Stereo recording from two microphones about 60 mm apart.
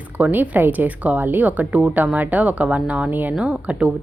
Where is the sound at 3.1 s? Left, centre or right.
Right.